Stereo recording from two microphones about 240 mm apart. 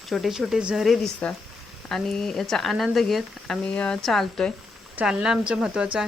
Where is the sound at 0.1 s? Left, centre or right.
Centre.